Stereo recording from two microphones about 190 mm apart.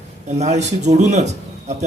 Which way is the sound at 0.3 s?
35° right (ahead or behind).